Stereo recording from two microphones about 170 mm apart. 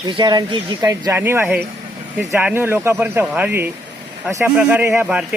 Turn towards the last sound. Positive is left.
turn(degrees=-10)  # may be behind; listen again after turning